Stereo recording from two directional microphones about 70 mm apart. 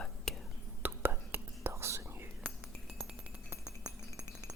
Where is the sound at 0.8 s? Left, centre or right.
Right.